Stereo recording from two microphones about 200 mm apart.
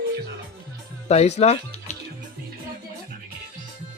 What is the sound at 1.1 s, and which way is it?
Speech, 35° left (ahead or behind).